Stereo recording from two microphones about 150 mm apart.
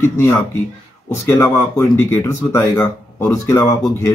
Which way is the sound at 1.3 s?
15° left (ahead or behind).